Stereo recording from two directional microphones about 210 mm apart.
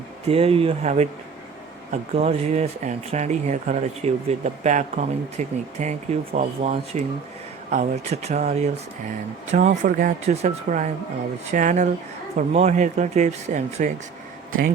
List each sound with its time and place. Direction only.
0.3 s speech: 30° right (ahead or behind)